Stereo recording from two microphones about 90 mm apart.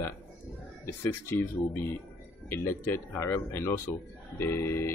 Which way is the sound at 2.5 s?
25° left (ahead or behind).